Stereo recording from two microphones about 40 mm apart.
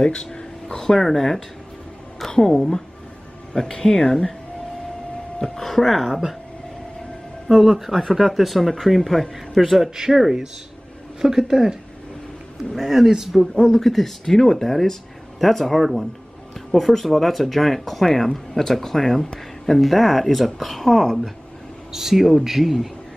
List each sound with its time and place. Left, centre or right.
0.0 s a sound: left
0.9 s speech: centre
5.4 s speech: centre
7.4 s speech: centre
9.8 s a man's voice: centre
12.7 s a man's voice: centre
13.7 s speech: centre